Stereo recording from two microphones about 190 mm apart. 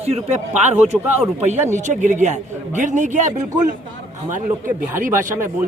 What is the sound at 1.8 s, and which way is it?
Speech, 40° right (ahead or behind).